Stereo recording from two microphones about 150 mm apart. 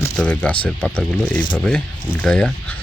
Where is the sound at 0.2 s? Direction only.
10° left (ahead or behind).